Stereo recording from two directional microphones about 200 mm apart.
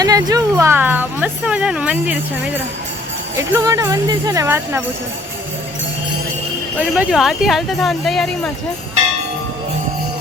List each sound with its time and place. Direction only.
0.0 s speech: 20° right (ahead or behind)
3.5 s speech: 15° right (ahead or behind)
6.7 s speech: 5° right (ahead or behind)